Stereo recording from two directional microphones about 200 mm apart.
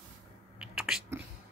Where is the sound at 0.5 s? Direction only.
5° right (ahead or behind).